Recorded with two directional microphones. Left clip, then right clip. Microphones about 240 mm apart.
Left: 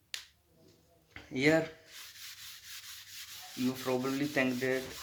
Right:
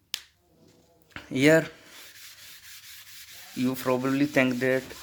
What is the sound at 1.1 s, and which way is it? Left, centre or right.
Speech, right.